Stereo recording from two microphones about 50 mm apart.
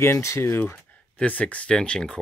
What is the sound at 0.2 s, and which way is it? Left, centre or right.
Speech, left.